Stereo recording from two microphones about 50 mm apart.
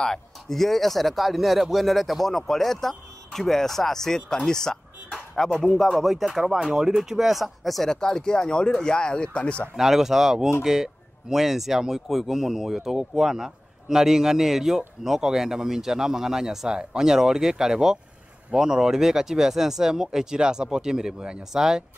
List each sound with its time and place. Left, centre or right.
0.0 s speech: centre
7.9 s speech: centre
9.8 s speech: centre